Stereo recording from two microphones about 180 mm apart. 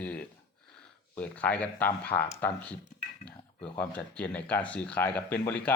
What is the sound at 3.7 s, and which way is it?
Speech, 5° left (ahead or behind).